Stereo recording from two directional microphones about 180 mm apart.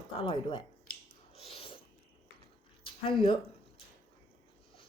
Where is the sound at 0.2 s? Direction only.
30° left (ahead or behind).